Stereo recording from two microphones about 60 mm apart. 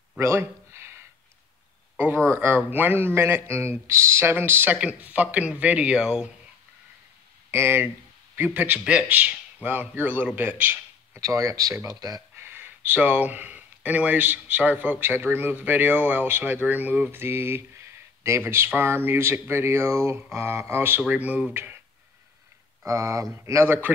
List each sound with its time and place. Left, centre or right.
0.2 s a sound: right
2.0 s a man's voice: right
4.4 s a man's voice: right
4.7 s a man's voice: right
5.9 s speech: centre
7.5 s a man's voice: right
8.5 s a man's voice: right
11.1 s speech: right
11.9 s speech: right
12.4 s a man's voice: right
21.1 s a man's voice: right
22.8 s speech: right
23.6 s a man's voice: right